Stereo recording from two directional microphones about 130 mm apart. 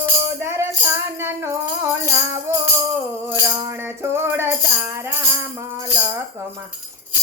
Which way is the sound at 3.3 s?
20° right (ahead or behind).